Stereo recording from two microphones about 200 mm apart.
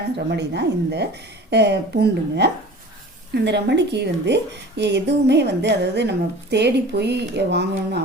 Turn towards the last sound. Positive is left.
turn(degrees=-55)  # may be behind; listen again after turning